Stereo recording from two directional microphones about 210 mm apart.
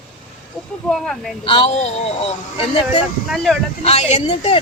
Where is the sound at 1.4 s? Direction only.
25° left (ahead or behind).